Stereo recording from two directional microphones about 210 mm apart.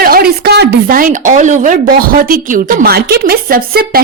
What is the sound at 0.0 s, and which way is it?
A woman's voice, 45° right (ahead or behind).